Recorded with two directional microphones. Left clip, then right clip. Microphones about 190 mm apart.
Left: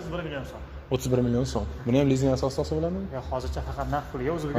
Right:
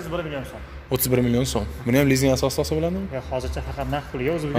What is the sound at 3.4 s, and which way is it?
Speech, 45° right (ahead or behind).